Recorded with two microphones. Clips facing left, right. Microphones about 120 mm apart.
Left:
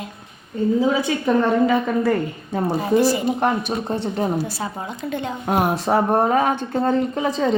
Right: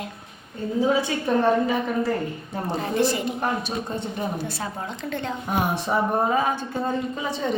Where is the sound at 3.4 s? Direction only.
60° left (ahead or behind); by 4.3 s 75° left (ahead or behind).